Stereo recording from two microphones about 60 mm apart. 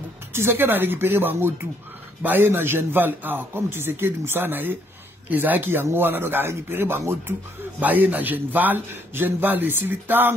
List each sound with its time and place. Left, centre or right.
0.3 s a man's voice: right